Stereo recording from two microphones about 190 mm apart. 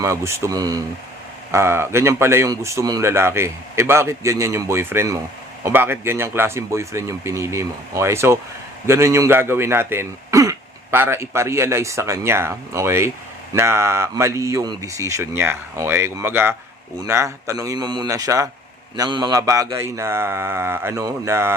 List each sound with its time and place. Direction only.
0.0 s speech: 15° right (ahead or behind)